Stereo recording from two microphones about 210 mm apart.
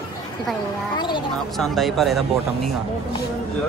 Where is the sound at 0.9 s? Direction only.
20° left (ahead or behind).